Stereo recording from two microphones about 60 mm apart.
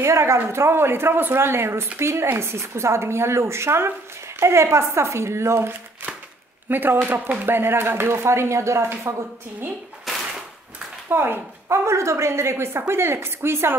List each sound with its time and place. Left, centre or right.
0.0 s speech: right
6.7 s speech: right
10.1 s a sound: centre
11.1 s speech: right